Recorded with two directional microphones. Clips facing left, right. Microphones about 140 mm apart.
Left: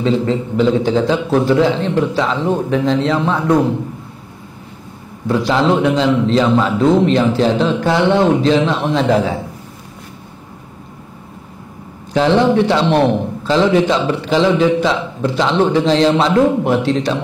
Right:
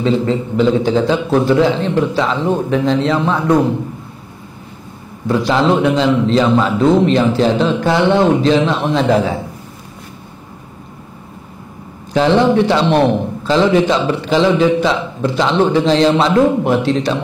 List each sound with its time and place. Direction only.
0.0 s a man's voice: 20° right (ahead or behind)
5.3 s a man's voice: 20° right (ahead or behind)
12.1 s a man's voice: 20° right (ahead or behind)
13.1 s a man's voice: 30° right (ahead or behind)
13.6 s a man's voice: 15° right (ahead or behind)